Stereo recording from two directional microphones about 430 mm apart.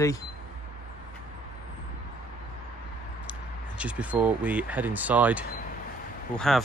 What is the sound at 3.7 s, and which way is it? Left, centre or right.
Speech, centre.